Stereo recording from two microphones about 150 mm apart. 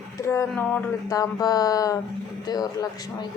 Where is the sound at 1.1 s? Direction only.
25° left (ahead or behind).